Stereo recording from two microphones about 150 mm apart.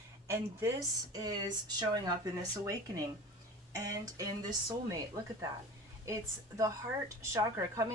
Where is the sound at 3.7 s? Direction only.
25° right (ahead or behind).